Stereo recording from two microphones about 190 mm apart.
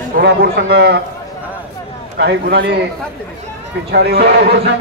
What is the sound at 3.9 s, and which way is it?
Speech, 60° right (ahead or behind).